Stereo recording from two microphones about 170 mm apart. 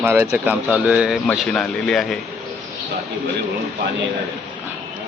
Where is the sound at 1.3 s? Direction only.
5° left (ahead or behind).